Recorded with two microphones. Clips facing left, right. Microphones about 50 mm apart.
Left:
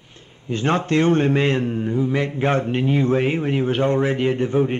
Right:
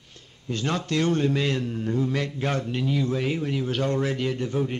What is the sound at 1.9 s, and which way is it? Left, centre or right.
Speech, centre.